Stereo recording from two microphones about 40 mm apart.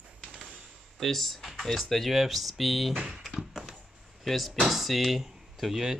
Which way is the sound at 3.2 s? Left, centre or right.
Centre.